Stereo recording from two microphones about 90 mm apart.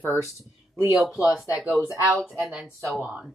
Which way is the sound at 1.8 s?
35° right (ahead or behind).